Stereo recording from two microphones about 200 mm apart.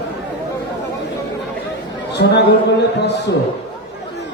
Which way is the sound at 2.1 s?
55° left (ahead or behind).